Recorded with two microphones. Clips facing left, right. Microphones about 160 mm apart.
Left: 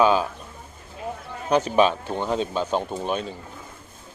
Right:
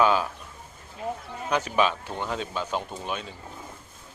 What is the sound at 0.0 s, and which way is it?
Speech, 20° left (ahead or behind).